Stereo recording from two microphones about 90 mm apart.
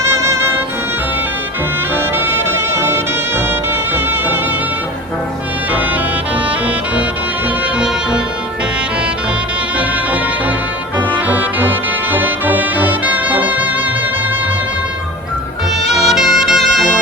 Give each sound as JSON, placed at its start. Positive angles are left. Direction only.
{"t": 0.0, "sound": "music", "side_deg": -30}
{"t": 2.1, "sound": "music", "side_deg": -25}
{"t": 11.1, "sound": "music", "side_deg": -20}
{"t": 15.8, "sound": "music", "side_deg": -5}